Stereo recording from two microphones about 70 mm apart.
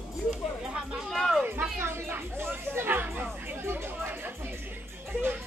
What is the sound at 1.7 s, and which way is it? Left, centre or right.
Chatter, right.